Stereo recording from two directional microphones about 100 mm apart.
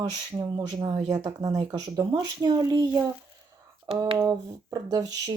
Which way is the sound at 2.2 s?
45° right (ahead or behind).